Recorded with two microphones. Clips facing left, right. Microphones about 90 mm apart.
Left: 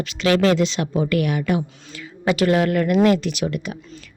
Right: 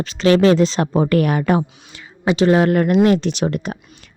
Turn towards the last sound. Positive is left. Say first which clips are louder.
# right 4 dB
turn(degrees=-40)  # may be behind; listen again after turning